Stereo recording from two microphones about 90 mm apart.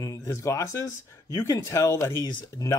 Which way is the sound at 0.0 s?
35° left (ahead or behind).